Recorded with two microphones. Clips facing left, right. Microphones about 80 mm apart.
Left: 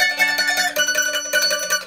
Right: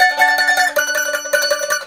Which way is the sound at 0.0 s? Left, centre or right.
Right.